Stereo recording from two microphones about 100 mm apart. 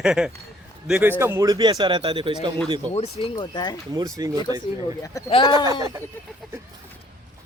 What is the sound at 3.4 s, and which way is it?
Speech, 45° left (ahead or behind).